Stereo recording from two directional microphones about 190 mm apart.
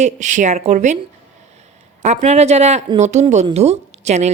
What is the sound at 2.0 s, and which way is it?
A woman's voice, 40° right (ahead or behind).